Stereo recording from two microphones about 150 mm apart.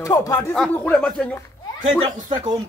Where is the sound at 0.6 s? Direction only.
5° left (ahead or behind).